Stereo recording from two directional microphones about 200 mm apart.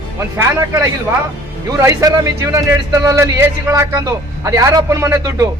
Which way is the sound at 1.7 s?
15° right (ahead or behind).